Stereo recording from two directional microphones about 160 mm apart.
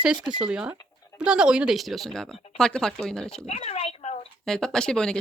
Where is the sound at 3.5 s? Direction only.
40° left (ahead or behind).